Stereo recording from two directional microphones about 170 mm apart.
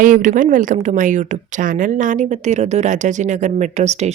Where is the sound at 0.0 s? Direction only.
50° right (ahead or behind).